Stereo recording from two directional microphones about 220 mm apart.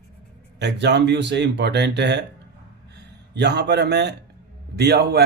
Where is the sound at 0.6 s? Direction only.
50° right (ahead or behind).